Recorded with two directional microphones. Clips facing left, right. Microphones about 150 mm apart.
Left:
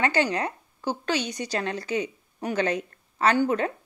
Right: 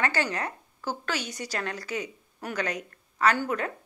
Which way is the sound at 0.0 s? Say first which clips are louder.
Left 4 dB; 20° left (ahead or behind).